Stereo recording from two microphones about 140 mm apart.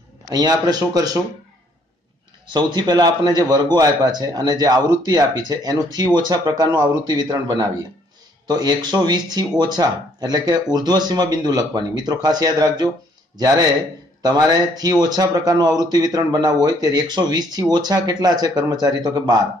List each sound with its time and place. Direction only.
0.3 s speech: 30° right (ahead or behind)
2.5 s speech: 30° right (ahead or behind)
14.2 s speech: 30° right (ahead or behind)